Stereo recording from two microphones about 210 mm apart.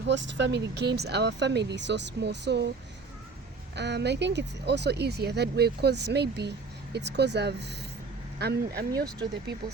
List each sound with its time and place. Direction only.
0.1 s speech: 60° right (ahead or behind)
3.8 s speech: 55° right (ahead or behind)